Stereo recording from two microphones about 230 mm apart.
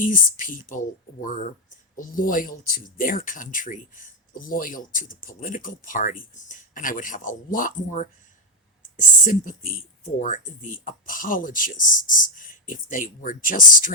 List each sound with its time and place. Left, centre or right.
0.0 s speech: left